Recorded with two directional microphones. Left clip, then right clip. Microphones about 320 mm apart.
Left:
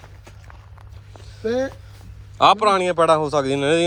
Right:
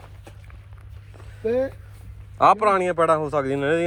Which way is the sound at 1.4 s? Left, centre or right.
Left.